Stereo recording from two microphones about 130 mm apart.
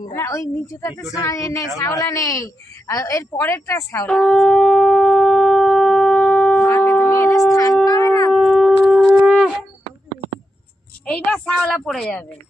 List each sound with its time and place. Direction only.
0.0 s a woman's voice: 25° left (ahead or behind)
4.0 s shofar: 5° left (ahead or behind); by 7.4 s 25° left (ahead or behind)
7.5 s wind instrument: 25° left (ahead or behind)
7.9 s shofar: 25° left (ahead or behind)
8.3 s shofar: centre (ahead or behind)
11.0 s a sound: 10° left (ahead or behind)